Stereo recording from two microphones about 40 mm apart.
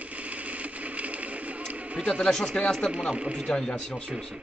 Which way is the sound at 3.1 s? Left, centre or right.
Right.